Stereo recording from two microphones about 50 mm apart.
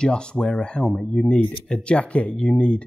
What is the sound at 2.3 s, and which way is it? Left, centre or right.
Speech, centre.